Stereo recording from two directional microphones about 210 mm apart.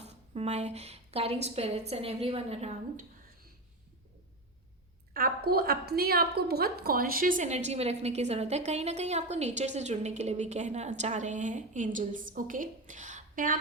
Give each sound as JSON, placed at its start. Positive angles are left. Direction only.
{"t": 0.0, "sound": "a woman's voice", "side_deg": -30}
{"t": 5.1, "sound": "a woman's voice", "side_deg": -45}